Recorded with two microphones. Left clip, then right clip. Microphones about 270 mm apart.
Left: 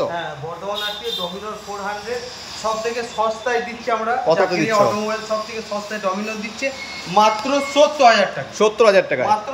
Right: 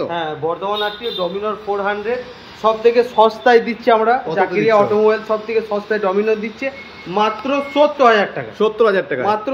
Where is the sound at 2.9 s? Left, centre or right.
Right.